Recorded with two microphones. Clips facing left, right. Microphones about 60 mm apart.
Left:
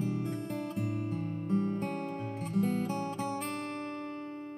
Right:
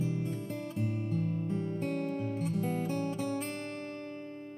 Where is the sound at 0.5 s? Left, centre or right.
Left.